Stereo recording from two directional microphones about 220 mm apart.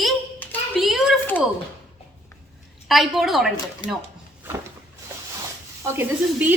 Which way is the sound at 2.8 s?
Centre (ahead or behind).